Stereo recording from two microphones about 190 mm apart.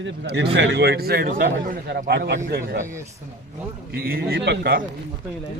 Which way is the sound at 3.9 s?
55° right (ahead or behind).